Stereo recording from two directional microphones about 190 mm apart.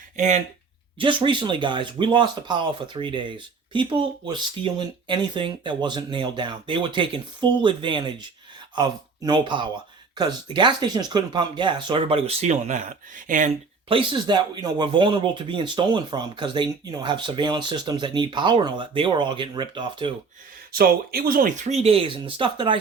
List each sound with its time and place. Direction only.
0.2 s speech: 35° right (ahead or behind)
0.9 s speech: 25° right (ahead or behind); by 13.5 s 45° right (ahead or behind)
13.8 s speech: 25° right (ahead or behind)
20.7 s speech: 50° right (ahead or behind); by 22.8 s 25° right (ahead or behind)